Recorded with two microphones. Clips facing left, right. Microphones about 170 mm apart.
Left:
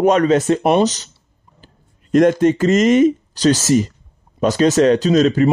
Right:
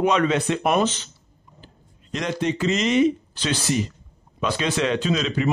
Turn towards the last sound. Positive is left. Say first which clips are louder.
# left 10 dB
turn(degrees=45)  # may be behind; listen again after turning